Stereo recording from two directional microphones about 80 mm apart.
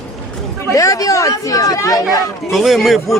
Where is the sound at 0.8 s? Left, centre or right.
Left.